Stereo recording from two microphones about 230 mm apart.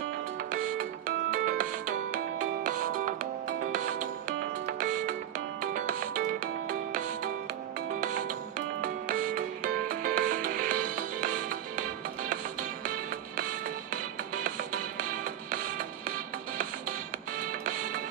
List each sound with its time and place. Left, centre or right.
0.5 s music: right
8.8 s music: right
12.8 s music: right